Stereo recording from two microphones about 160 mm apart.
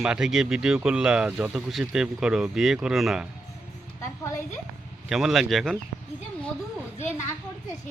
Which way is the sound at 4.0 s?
15° left (ahead or behind).